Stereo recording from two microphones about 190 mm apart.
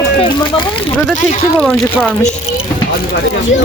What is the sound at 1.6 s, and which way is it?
Speech, 5° left (ahead or behind).